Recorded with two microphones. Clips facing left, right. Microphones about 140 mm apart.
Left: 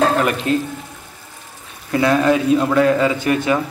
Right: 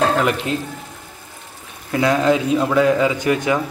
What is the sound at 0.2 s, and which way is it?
Speech, 20° right (ahead or behind).